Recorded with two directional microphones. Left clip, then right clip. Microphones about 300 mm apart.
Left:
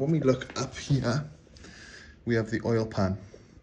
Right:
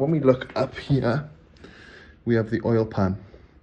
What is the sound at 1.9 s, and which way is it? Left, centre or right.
Speech, right.